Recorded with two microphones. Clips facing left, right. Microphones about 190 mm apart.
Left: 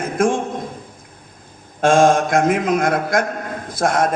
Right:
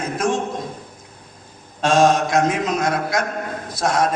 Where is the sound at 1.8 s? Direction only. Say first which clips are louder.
Left 2 dB; 50° left (ahead or behind).